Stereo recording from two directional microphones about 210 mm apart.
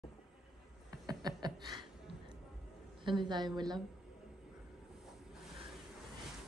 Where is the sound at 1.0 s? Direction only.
20° right (ahead or behind).